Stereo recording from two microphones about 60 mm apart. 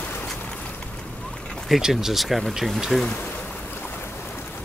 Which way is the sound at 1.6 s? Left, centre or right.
Centre.